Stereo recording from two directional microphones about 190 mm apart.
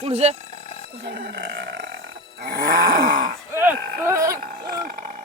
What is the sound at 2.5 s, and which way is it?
Groan, 50° right (ahead or behind).